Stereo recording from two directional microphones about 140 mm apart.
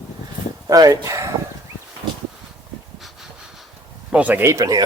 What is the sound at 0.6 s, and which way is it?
Speech, 25° right (ahead or behind).